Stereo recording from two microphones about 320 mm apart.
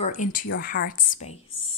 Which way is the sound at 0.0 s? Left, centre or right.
Left.